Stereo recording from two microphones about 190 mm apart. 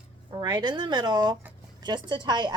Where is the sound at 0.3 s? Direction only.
20° right (ahead or behind).